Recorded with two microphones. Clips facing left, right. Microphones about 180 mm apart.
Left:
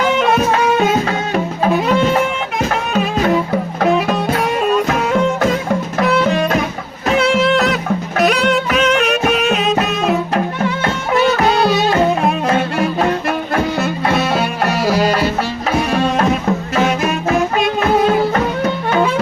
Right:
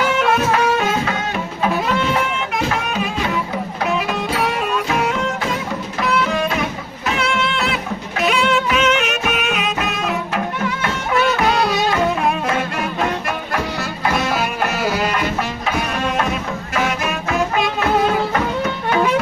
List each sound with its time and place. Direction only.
3.8 s music: 35° left (ahead or behind)
5.4 s music: 55° left (ahead or behind)
7.2 s music: 40° left (ahead or behind)
11.6 s music: 30° left (ahead or behind)